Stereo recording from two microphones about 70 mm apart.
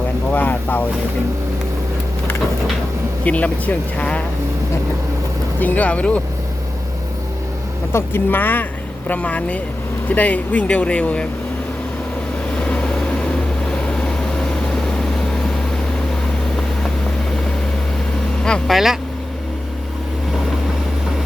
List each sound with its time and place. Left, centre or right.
0.3 s speech: left
3.2 s speech: left
5.5 s speech: left
7.9 s speech: left
13.8 s vehicle: centre
18.7 s speech: centre